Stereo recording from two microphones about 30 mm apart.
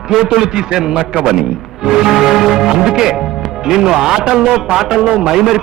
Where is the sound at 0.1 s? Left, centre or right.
Centre.